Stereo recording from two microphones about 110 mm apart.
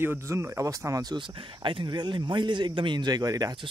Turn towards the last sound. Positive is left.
turn(degrees=-35)  # may be behind; listen again after turning